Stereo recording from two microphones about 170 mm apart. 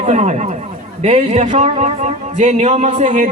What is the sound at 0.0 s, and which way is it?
Speech, 40° right (ahead or behind).